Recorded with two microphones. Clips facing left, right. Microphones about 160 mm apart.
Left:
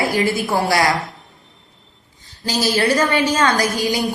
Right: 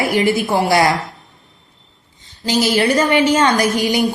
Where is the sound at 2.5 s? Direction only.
20° right (ahead or behind).